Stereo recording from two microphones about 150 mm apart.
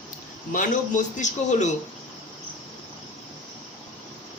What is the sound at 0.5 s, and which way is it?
A man's voice, 55° left (ahead or behind).